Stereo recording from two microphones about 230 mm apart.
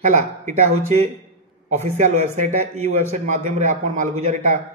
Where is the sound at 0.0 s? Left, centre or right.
Right.